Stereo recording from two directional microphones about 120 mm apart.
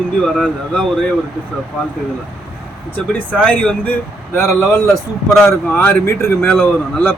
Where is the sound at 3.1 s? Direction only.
10° left (ahead or behind).